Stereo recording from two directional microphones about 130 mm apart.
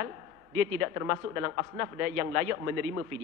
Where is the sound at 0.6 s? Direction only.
25° right (ahead or behind).